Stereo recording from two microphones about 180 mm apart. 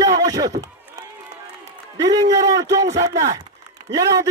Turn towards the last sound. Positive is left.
turn(degrees=-20)  # may be behind; listen again after turning